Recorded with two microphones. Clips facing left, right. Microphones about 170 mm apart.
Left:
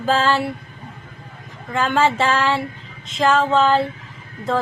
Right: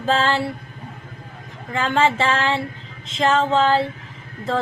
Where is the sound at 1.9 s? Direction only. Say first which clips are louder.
Left 1 dB; 25° right (ahead or behind).